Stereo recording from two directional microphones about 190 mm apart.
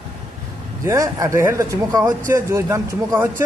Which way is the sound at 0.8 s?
15° right (ahead or behind).